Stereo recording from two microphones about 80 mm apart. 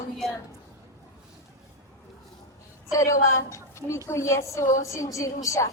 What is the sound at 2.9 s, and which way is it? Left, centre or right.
A woman's voice, left.